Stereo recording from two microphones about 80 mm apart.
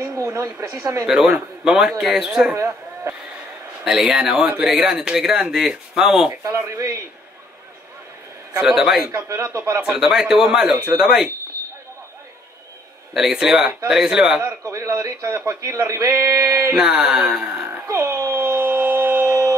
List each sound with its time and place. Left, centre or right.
0.0 s speech: right
1.0 s speech: centre
2.5 s speech: right
3.8 s speech: centre
6.4 s a man's voice: right
8.5 s speech: centre
9.1 s a man's voice: right
9.8 s speech: centre
13.1 s speech: centre
14.4 s a man's voice: right
16.7 s speech: centre
17.8 s a sound: right